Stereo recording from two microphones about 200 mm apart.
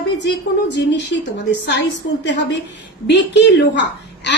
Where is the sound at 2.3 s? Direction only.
65° left (ahead or behind).